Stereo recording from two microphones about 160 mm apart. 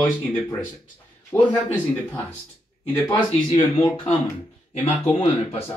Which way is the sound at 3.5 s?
30° left (ahead or behind).